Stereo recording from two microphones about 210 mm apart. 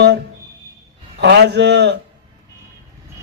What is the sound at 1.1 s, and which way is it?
Speech, 55° right (ahead or behind).